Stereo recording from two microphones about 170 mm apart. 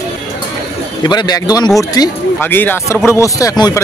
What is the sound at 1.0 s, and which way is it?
Speech, 25° left (ahead or behind).